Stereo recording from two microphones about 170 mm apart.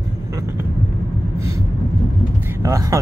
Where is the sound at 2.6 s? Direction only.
20° right (ahead or behind).